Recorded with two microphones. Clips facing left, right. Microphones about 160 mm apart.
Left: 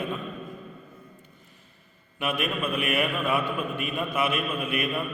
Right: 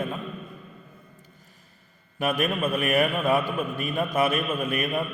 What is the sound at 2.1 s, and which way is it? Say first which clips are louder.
A man's voice: right 3 dB; 40° right (ahead or behind).